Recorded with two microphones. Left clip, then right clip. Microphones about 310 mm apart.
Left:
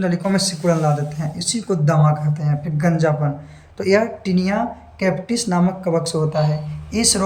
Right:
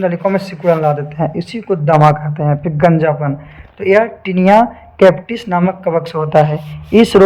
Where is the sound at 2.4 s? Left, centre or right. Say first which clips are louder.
Right 12 dB; right.